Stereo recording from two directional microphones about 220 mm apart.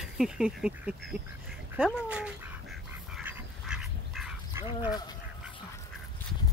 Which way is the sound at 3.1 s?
Centre (ahead or behind).